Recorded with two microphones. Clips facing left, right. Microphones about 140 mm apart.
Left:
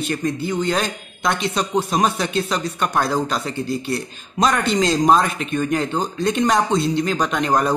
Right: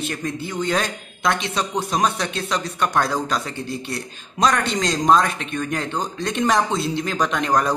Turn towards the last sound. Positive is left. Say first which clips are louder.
# left 2 dB
turn(degrees=0)  # may be behind; listen again after turning